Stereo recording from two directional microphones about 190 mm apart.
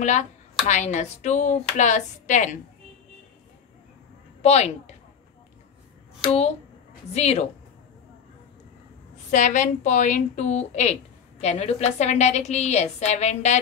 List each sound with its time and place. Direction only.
0.0 s a woman's voice: 40° left (ahead or behind)
4.4 s a woman's voice: 35° left (ahead or behind)
7.2 s a woman's voice: 35° left (ahead or behind)
9.3 s a woman's voice: 40° left (ahead or behind)